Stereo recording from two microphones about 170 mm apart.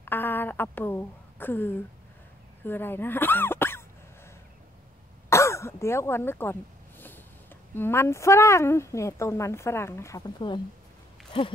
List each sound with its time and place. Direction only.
0.0 s a sound: 10° left (ahead or behind)
2.6 s speech: 10° left (ahead or behind)
5.3 s throat clearing: 15° left (ahead or behind)
7.7 s a woman's voice: 15° left (ahead or behind)
11.3 s hoot: 30° left (ahead or behind)